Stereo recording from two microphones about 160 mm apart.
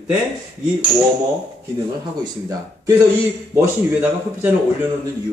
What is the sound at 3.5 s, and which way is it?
Speech, 10° right (ahead or behind).